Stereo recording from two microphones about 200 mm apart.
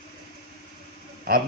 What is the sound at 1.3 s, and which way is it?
Speech, 45° right (ahead or behind).